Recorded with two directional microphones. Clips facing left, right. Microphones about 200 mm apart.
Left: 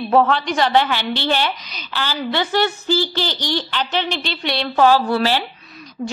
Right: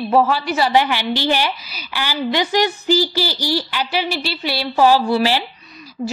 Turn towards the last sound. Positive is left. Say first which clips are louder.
# right 1 dB
turn(degrees=-30)  # may be behind; listen again after turning